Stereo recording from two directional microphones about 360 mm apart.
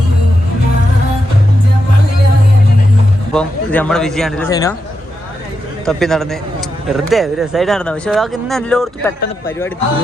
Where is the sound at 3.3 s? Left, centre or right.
Centre.